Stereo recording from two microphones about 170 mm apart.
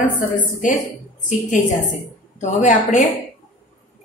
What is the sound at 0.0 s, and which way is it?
Speech, 50° left (ahead or behind).